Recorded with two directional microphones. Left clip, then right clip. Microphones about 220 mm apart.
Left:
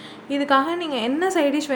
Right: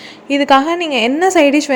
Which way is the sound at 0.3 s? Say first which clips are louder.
Right 8 dB; 25° right (ahead or behind).